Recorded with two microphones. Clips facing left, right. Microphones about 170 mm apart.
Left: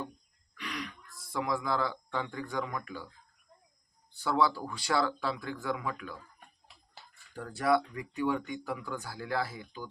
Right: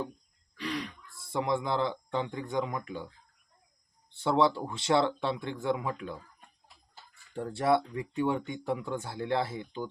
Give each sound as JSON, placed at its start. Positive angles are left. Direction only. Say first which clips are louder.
{"t": 0.5, "sound": "speech", "louder": "right 5 dB", "side_deg": -30}
{"t": 4.1, "sound": "speech", "louder": "right 3 dB", "side_deg": -25}
{"t": 7.3, "sound": "speech", "louder": "right 2 dB", "side_deg": -25}